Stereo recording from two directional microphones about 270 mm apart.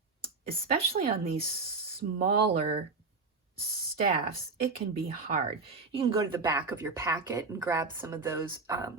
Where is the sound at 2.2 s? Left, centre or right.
Right.